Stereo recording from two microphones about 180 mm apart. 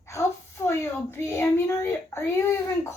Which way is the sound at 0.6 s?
15° left (ahead or behind).